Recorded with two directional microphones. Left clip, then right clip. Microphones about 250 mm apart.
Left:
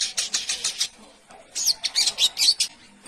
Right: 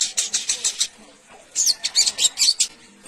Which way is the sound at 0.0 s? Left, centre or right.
Centre.